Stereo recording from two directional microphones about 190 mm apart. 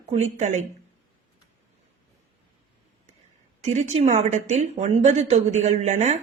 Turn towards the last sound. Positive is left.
turn(degrees=-35)  # may be behind; listen again after turning